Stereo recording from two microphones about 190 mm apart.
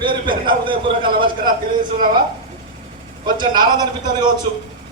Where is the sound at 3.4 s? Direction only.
20° right (ahead or behind).